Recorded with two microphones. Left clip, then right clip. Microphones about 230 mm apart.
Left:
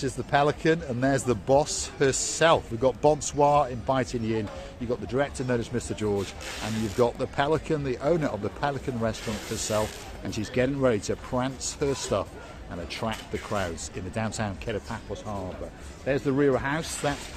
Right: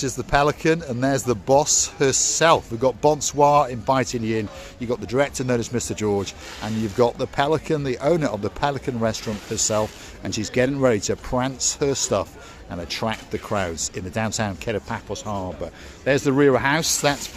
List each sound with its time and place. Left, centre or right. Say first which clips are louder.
0.0 s speech: right 4 dB; right
16.0 s speech: right 7 dB; right